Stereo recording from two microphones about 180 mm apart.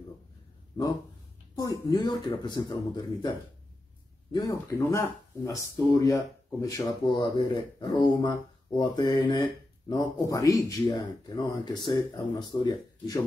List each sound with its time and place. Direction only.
0.8 s speech: 25° left (ahead or behind)